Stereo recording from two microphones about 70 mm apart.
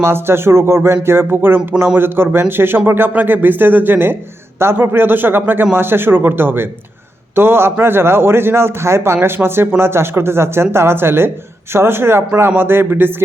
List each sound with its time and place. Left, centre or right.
0.0 s speech: right